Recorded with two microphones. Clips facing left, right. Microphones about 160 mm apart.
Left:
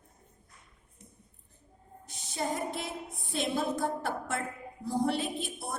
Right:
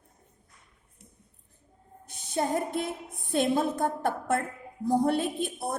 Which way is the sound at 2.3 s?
55° right (ahead or behind).